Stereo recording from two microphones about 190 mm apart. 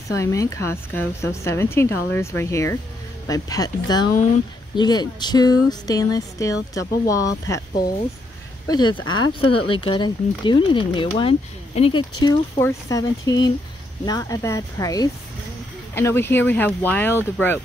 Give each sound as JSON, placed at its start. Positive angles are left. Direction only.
{"t": 0.2, "sound": "a woman's voice", "side_deg": 15}
{"t": 9.0, "sound": "speech", "side_deg": 90}
{"t": 9.7, "sound": "a woman's voice", "side_deg": 25}